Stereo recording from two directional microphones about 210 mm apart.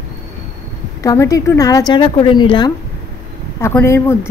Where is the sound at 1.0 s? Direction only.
15° left (ahead or behind).